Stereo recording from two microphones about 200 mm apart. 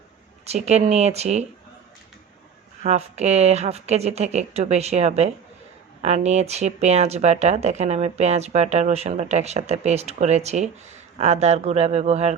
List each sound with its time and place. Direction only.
0.4 s speech: 35° right (ahead or behind)
2.8 s speech: 35° right (ahead or behind)